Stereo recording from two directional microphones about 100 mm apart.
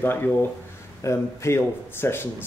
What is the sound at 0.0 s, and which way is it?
Speech, 20° left (ahead or behind).